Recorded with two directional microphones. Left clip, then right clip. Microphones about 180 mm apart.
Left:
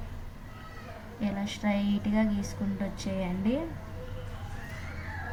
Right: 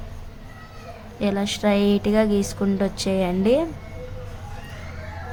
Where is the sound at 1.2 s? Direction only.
65° right (ahead or behind).